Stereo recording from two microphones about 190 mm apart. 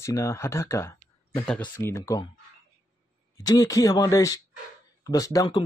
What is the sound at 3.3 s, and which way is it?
Speech, 20° left (ahead or behind).